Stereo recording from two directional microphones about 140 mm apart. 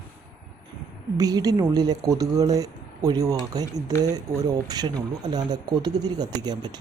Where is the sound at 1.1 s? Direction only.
25° right (ahead or behind).